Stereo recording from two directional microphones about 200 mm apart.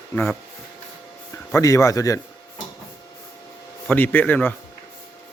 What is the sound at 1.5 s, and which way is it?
Speech, 15° left (ahead or behind).